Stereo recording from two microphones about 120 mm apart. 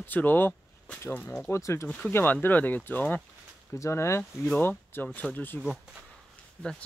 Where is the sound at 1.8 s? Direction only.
5° left (ahead or behind).